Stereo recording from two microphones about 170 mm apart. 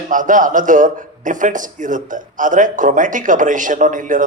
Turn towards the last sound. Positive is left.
turn(degrees=-50)  # may be behind; listen again after turning